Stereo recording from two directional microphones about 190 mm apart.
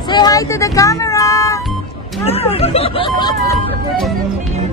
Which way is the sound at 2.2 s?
30° left (ahead or behind).